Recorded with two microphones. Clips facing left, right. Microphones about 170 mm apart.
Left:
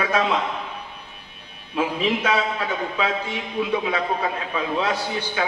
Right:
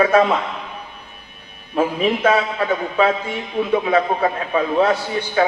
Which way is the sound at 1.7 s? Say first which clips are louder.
Right 4 dB; 50° right (ahead or behind).